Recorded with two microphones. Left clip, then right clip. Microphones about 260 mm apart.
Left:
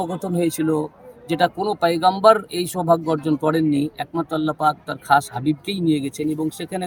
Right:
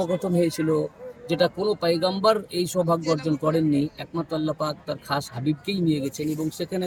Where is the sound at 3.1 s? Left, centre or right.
Left.